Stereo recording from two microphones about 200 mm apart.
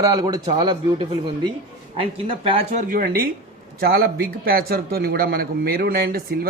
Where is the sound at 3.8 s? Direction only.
50° right (ahead or behind).